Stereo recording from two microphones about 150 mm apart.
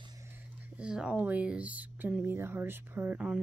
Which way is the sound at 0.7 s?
5° right (ahead or behind).